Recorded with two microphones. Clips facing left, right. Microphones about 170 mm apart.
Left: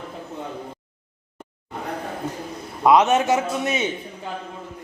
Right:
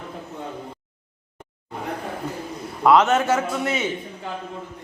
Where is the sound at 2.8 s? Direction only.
15° left (ahead or behind).